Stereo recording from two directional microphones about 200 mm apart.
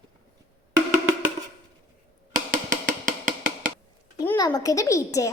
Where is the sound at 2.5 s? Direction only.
40° right (ahead or behind).